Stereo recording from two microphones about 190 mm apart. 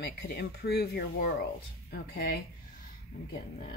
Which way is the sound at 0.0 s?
55° left (ahead or behind).